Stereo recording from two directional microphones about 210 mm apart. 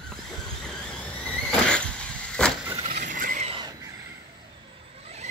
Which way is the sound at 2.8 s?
35° right (ahead or behind).